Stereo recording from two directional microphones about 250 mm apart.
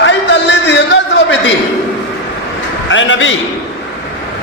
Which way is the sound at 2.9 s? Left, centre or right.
Left.